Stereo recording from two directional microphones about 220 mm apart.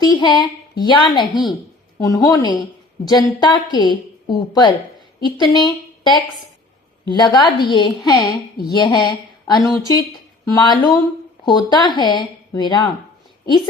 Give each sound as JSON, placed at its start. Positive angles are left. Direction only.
{"t": 0.0, "sound": "a woman's voice", "side_deg": 20}